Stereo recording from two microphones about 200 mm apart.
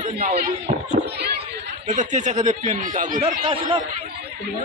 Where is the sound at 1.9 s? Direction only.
40° right (ahead or behind).